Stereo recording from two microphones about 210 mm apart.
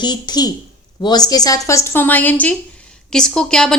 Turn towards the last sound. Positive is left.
turn(degrees=5)  # may be behind; listen again after turning